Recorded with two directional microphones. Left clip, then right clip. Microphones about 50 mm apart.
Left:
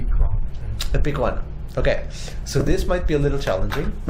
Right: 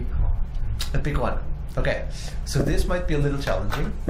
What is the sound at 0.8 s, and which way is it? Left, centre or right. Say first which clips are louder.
Speech: left 4 dB; left.